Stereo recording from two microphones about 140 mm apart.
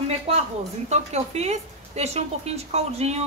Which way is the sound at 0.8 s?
50° right (ahead or behind).